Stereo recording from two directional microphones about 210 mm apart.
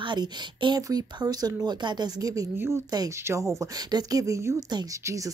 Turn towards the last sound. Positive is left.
turn(degrees=-15)  # may be behind; listen again after turning